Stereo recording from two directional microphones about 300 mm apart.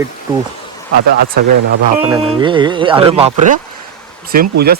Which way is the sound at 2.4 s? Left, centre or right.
Centre.